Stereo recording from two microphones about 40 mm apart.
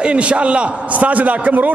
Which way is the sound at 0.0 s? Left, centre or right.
Right.